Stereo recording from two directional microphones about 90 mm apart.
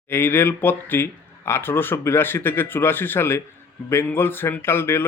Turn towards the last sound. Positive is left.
turn(degrees=25)  # may be behind; listen again after turning